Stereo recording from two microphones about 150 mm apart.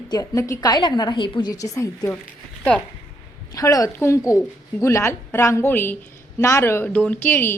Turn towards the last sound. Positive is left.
turn(degrees=15)  # may be behind; listen again after turning